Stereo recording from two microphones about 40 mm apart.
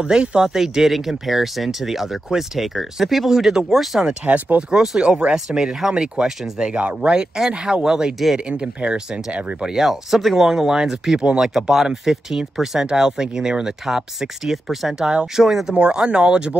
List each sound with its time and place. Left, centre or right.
0.2 s speech: right
0.5 s speech: centre
4.2 s speech: right
4.6 s speech: right
6.6 s speech: right
9.6 s speech: centre
15.7 s speech: right